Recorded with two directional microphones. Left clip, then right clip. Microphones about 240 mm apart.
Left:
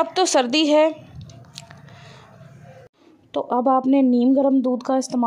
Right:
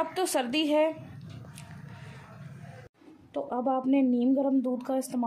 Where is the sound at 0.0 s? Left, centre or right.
Left.